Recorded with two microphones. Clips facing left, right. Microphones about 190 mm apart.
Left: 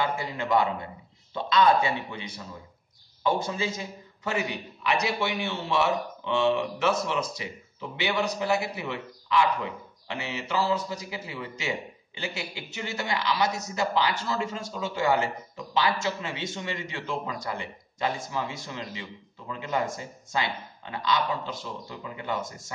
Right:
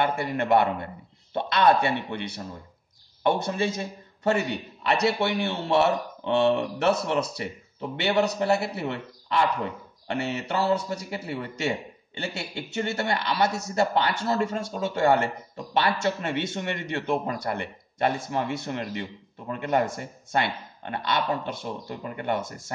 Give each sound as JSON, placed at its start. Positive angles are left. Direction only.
{"t": 0.0, "sound": "speech", "side_deg": -60}